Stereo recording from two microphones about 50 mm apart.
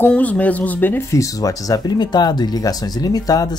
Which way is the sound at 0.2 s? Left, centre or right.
Left.